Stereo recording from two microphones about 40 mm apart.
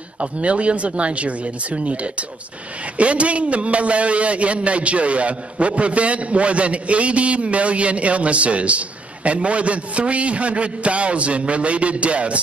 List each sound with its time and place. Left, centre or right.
0.2 s a man's voice: right